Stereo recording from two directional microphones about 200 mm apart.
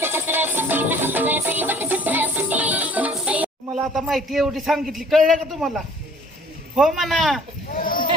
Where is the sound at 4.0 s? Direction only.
Centre (ahead or behind).